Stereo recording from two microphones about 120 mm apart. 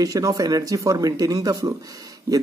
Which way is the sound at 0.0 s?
30° right (ahead or behind).